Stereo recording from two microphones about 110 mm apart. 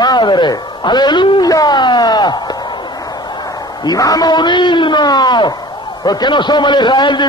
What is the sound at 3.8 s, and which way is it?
A man's voice, 35° left (ahead or behind).